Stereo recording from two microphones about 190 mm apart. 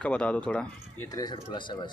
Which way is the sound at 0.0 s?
5° left (ahead or behind).